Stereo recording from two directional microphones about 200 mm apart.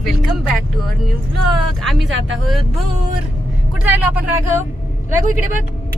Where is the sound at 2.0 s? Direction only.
70° right (ahead or behind).